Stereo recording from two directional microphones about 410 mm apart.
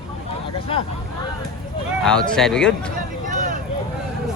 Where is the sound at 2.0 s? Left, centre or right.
Centre.